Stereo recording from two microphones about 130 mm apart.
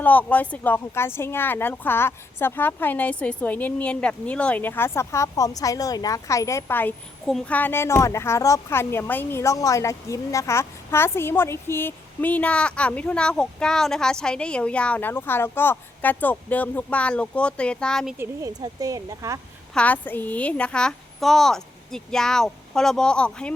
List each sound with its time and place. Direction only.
0.0 s speech: 10° left (ahead or behind)
18.2 s speech: 25° right (ahead or behind)
19.7 s a woman's voice: 10° left (ahead or behind)